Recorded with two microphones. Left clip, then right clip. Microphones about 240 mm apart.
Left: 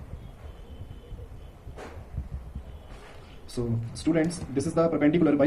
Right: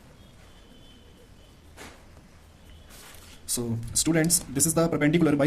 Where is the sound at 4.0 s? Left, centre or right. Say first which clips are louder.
Right 1 dB; right.